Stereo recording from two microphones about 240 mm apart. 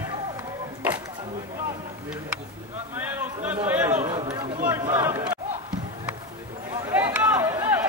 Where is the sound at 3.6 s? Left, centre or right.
Centre.